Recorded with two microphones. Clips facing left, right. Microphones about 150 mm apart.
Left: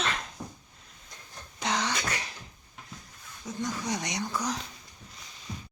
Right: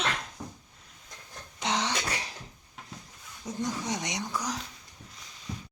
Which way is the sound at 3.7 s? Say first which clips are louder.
Left 1 dB; 10° right (ahead or behind).